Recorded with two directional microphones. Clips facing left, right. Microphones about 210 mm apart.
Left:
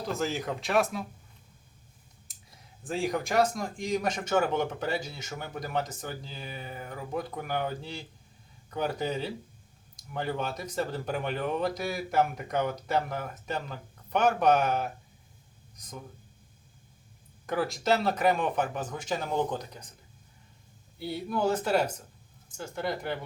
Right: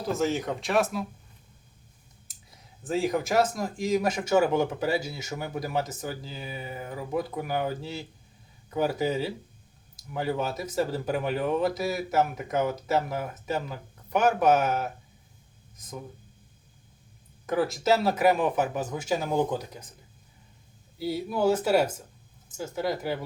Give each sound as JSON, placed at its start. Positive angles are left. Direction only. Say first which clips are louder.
{"t": 0.1, "sound": "speech", "louder": "right 5 dB", "side_deg": 0}
{"t": 2.8, "sound": "speech", "louder": "right 4 dB", "side_deg": 0}
{"t": 17.4, "sound": "speech", "louder": "right 4 dB", "side_deg": 0}
{"t": 21.0, "sound": "speech", "louder": "right 3 dB", "side_deg": -5}